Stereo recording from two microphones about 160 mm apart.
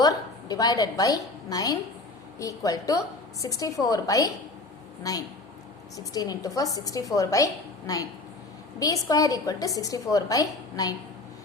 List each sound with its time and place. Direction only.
0.0 s a woman's voice: 25° left (ahead or behind)
6.0 s a woman's voice: 20° left (ahead or behind)